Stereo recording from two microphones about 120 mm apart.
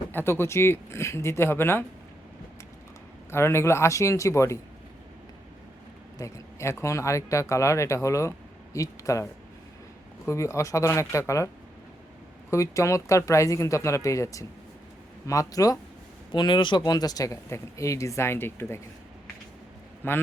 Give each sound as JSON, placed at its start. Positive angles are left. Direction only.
{"t": 0.1, "sound": "speech", "side_deg": 20}
{"t": 3.3, "sound": "speech", "side_deg": 20}
{"t": 6.1, "sound": "speech", "side_deg": 25}
{"t": 10.2, "sound": "speech", "side_deg": 25}
{"t": 16.3, "sound": "speech", "side_deg": 40}
{"t": 20.0, "sound": "a man's voice", "side_deg": 15}